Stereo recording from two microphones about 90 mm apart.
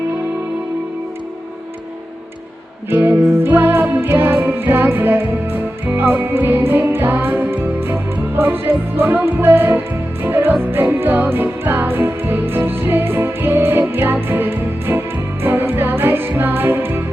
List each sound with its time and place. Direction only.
2.9 s music: 25° right (ahead or behind)